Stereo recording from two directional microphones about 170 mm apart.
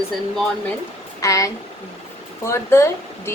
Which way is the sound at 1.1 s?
20° left (ahead or behind).